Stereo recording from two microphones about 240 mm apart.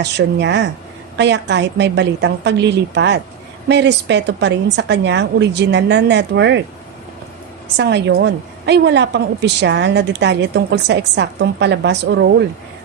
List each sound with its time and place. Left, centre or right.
0.0 s a woman's voice: right
7.8 s a woman's voice: right